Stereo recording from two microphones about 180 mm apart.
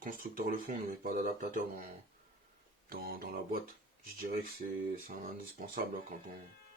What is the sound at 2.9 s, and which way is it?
Speech, 55° right (ahead or behind).